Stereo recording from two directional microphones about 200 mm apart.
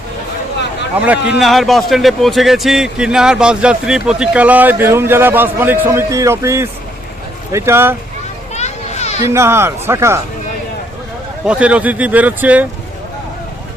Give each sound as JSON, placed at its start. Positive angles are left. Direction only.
{"t": 0.9, "sound": "a man's voice", "side_deg": -5}
{"t": 8.5, "sound": "children playing", "side_deg": 35}
{"t": 9.2, "sound": "speech", "side_deg": -15}
{"t": 11.4, "sound": "speech", "side_deg": -5}